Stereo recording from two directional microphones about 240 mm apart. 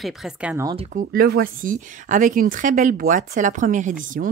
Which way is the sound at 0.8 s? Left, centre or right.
Right.